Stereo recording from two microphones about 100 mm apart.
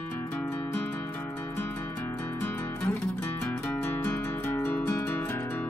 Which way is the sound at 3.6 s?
15° left (ahead or behind).